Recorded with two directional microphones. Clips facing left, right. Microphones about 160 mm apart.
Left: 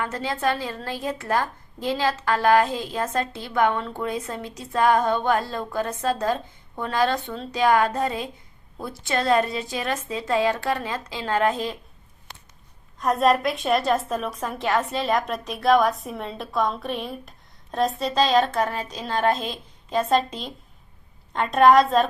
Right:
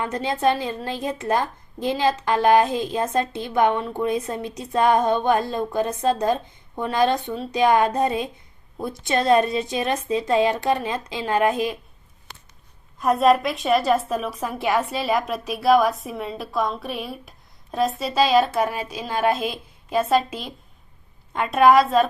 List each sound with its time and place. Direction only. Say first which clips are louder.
0.0 s a woman's voice: right 4 dB; 20° right (ahead or behind)
13.0 s a woman's voice: right 2 dB; centre (ahead or behind)